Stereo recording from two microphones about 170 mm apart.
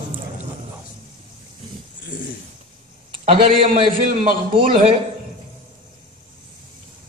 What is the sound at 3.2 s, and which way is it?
A man's voice, 35° right (ahead or behind).